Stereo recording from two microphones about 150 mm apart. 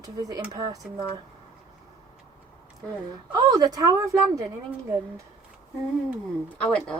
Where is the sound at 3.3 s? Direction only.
25° right (ahead or behind).